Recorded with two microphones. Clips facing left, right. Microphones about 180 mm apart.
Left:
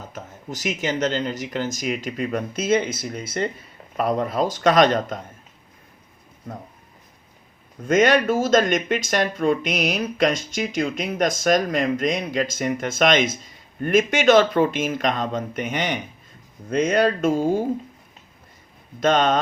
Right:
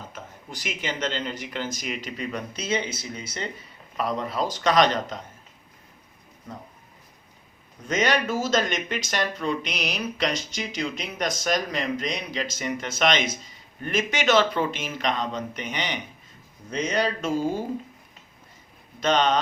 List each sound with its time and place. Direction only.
0.1 s speech: 45° left (ahead or behind)
7.9 s speech: 50° left (ahead or behind)
18.9 s speech: 50° left (ahead or behind)